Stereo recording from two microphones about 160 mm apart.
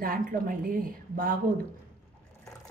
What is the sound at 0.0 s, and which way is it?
A woman's voice, 60° right (ahead or behind).